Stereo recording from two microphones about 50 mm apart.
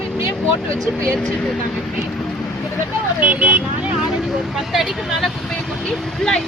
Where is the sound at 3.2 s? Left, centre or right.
Right.